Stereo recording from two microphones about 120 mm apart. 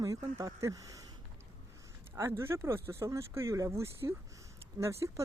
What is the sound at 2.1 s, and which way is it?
Speech, 20° right (ahead or behind).